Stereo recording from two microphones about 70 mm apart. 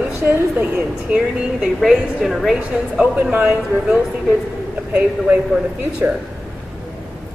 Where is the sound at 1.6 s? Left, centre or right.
Centre.